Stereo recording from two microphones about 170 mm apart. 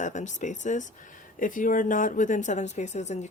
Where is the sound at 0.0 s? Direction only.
45° left (ahead or behind).